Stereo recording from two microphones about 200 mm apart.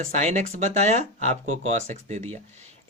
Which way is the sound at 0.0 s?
35° right (ahead or behind).